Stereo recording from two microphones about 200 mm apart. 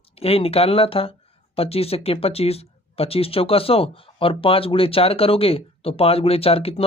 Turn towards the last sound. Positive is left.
turn(degrees=30)  # may be behind; listen again after turning